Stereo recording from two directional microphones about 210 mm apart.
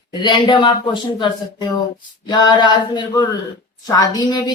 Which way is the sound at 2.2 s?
20° left (ahead or behind).